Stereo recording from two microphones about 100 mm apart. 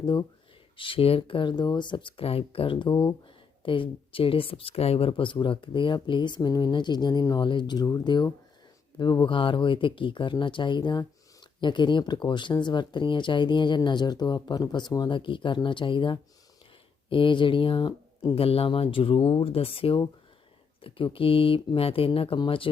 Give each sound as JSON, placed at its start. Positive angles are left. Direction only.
{"t": 0.8, "sound": "speech", "side_deg": 65}
{"t": 18.3, "sound": "speech", "side_deg": 75}